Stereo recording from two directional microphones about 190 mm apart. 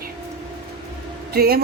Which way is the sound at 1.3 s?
55° right (ahead or behind).